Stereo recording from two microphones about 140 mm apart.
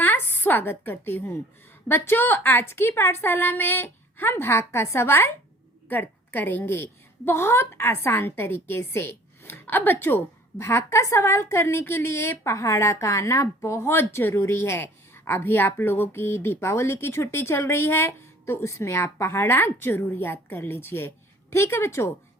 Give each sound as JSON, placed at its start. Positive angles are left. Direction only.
{"t": 0.0, "sound": "a woman's voice", "side_deg": 15}